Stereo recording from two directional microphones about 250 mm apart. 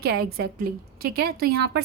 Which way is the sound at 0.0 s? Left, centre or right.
Right.